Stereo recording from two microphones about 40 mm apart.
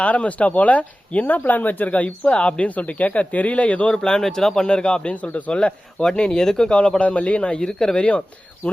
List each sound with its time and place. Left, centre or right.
0.0 s speech: left
2.6 s speech: left
3.9 s speech: centre
4.7 s speech: left
5.5 s speech: left
6.7 s speech: left
7.0 s speech: left
7.6 s speech: centre
7.9 s speech: left